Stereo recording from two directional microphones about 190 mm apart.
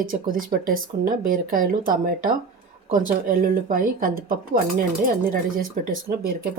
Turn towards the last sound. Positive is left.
turn(degrees=-50)  # may be behind; listen again after turning